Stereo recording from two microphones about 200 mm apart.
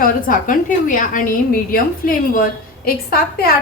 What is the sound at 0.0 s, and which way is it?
A woman's voice, 45° left (ahead or behind).